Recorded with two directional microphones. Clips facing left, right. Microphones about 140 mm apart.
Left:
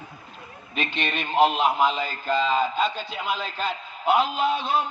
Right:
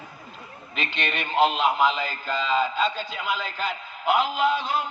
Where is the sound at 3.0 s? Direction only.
20° left (ahead or behind).